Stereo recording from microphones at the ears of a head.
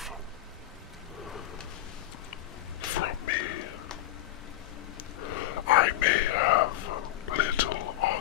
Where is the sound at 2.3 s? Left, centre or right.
Left.